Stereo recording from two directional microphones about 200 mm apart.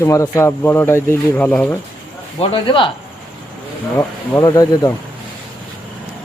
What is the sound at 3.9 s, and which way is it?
Speech, 15° left (ahead or behind).